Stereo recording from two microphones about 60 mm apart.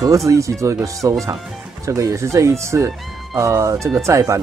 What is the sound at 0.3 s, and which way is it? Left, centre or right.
Speech, right.